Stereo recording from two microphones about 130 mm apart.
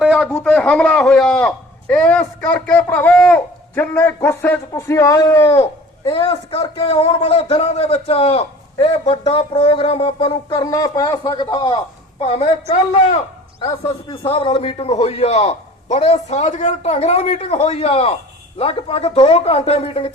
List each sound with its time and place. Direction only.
0.1 s a sound: 10° left (ahead or behind)
2.4 s a man's voice: 10° left (ahead or behind)
6.1 s a man's voice: 40° left (ahead or behind)
12.2 s a man's voice: 50° left (ahead or behind)